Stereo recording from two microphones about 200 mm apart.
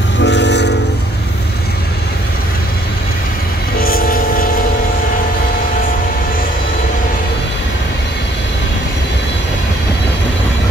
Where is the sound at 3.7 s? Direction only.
45° left (ahead or behind).